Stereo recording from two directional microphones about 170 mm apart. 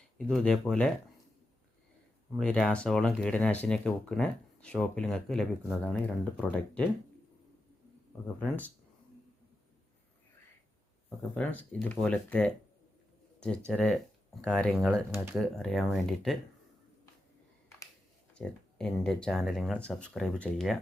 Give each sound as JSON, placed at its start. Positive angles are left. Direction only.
{"t": 0.2, "sound": "speech", "side_deg": 0}
{"t": 2.4, "sound": "speech", "side_deg": 5}
{"t": 8.4, "sound": "speech", "side_deg": 10}
{"t": 11.3, "sound": "speech", "side_deg": 5}
{"t": 13.7, "sound": "speech", "side_deg": 5}
{"t": 18.3, "sound": "speech", "side_deg": 5}